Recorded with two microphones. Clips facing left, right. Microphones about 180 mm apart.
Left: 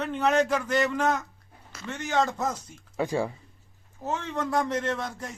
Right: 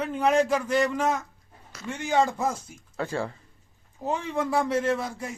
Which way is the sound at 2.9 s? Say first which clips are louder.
Left 3 dB; 15° left (ahead or behind).